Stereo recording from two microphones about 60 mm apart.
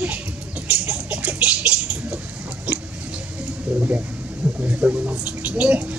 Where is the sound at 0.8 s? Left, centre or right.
Right.